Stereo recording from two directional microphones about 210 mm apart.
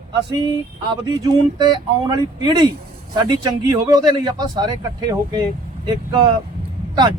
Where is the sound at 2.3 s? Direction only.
20° right (ahead or behind).